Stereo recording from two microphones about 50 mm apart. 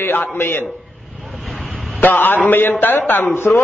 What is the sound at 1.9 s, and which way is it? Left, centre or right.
A man's voice, left.